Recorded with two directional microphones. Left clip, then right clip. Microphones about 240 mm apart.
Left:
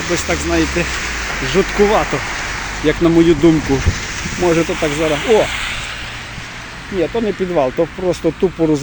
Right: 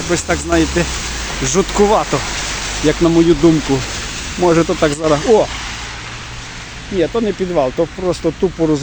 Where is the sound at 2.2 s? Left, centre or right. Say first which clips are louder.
Even; right.